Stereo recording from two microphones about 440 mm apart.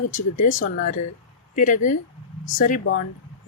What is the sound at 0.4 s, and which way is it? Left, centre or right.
Speech, centre.